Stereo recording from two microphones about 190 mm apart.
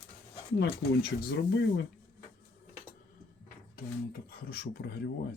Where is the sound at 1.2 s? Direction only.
65° left (ahead or behind).